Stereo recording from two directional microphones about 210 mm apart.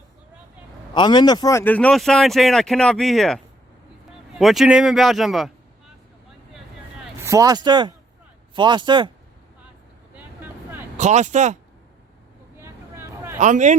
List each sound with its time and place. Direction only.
0.9 s speech: 20° left (ahead or behind); by 5.5 s centre (ahead or behind)
7.3 s speech: 15° right (ahead or behind)
10.2 s vehicle: 10° right (ahead or behind)
10.9 s speech: 35° right (ahead or behind)
12.5 s vehicle: 10° right (ahead or behind)
13.4 s speech: 35° right (ahead or behind)